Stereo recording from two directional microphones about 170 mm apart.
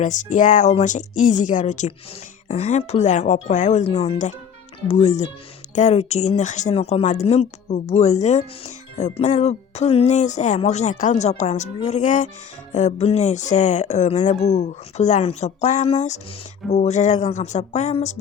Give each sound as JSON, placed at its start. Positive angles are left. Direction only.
{"t": 0.0, "sound": "speech", "side_deg": 45}